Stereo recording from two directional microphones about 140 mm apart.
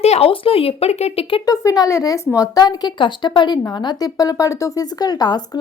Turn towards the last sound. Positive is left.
turn(degrees=30)  # may be behind; listen again after turning